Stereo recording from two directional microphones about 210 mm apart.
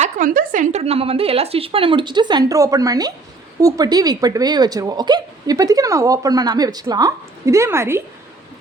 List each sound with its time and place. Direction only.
0.0 s a woman's voice: 40° right (ahead or behind); by 8.0 s 10° right (ahead or behind)